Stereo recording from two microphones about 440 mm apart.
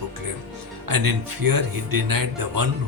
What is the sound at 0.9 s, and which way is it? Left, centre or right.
Speech, right.